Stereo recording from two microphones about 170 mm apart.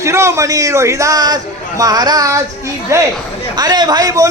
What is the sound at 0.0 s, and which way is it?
A man's voice, 15° right (ahead or behind).